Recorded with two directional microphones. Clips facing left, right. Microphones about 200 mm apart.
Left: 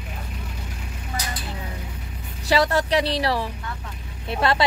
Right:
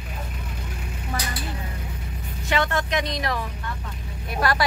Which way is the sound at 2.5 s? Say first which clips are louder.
Left 4 dB; 35° left (ahead or behind).